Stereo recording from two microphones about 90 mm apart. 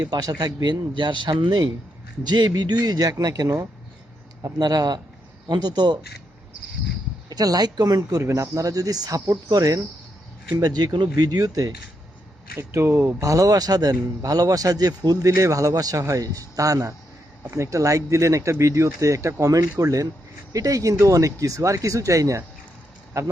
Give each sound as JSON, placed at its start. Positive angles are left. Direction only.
{"t": 0.0, "sound": "a man's voice", "side_deg": -45}
{"t": 7.3, "sound": "a man's voice", "side_deg": -45}
{"t": 12.5, "sound": "speech", "side_deg": -30}
{"t": 13.1, "sound": "speech", "side_deg": -40}